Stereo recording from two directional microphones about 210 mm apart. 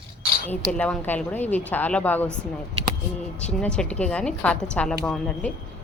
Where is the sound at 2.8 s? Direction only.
30° right (ahead or behind).